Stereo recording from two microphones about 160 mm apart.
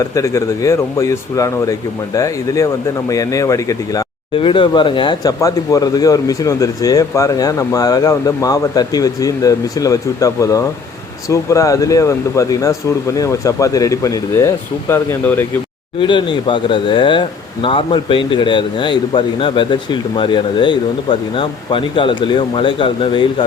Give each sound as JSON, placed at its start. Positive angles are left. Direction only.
{"t": 0.1, "sound": "speech", "side_deg": 20}
{"t": 4.4, "sound": "speech", "side_deg": 30}
{"t": 16.0, "sound": "speech", "side_deg": 30}